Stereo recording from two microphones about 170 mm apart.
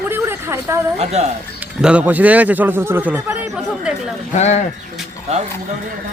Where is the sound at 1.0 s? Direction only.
40° right (ahead or behind).